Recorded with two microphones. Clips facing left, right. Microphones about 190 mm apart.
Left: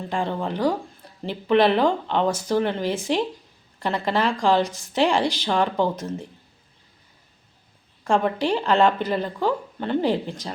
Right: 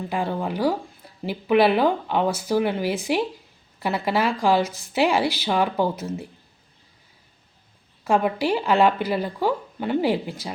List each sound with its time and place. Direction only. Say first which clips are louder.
0.1 s speech: left 1 dB; 10° right (ahead or behind)
8.0 s speech: even; 5° right (ahead or behind)